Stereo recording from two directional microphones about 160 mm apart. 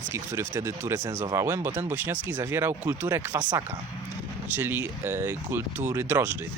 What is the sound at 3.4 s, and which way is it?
Speech, 25° right (ahead or behind).